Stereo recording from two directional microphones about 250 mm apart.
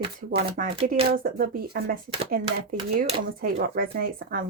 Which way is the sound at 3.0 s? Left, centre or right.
Right.